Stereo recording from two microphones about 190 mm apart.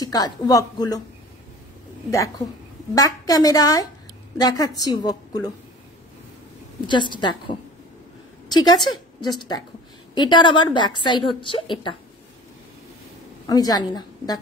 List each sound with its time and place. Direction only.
0.0 s a woman's voice: 20° left (ahead or behind)
2.0 s a woman's voice: 15° left (ahead or behind)
6.9 s a woman's voice: 25° left (ahead or behind)
8.6 s a woman's voice: 20° left (ahead or behind)
13.5 s a woman's voice: 20° left (ahead or behind)